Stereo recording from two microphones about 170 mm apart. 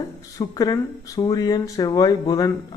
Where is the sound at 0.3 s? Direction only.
20° left (ahead or behind).